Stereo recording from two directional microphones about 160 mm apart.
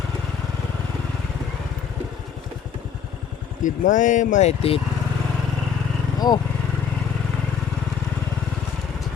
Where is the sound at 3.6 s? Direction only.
50° left (ahead or behind).